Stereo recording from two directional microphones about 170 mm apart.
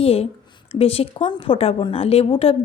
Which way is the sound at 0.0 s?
35° left (ahead or behind).